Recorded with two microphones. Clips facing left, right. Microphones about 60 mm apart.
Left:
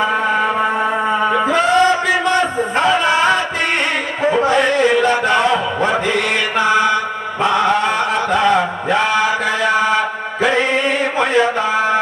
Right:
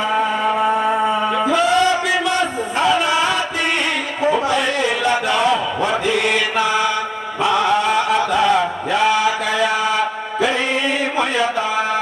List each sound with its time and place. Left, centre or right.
1.4 s a sound: left
6.6 s mantra: left
7.4 s chant: left